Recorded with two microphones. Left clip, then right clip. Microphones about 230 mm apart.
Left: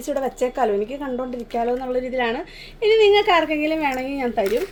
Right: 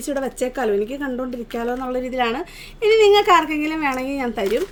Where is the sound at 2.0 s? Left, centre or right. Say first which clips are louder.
Right 1 dB; right.